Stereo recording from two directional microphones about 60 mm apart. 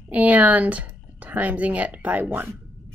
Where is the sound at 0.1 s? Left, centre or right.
Right.